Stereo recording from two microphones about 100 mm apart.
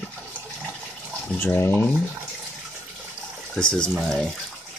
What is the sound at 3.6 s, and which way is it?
Speech, 10° left (ahead or behind).